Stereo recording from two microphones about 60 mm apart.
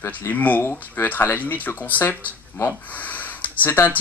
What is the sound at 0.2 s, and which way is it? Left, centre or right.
Speech, left.